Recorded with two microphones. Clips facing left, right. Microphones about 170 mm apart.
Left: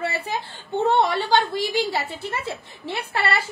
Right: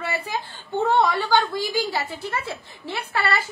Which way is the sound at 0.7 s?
25° left (ahead or behind).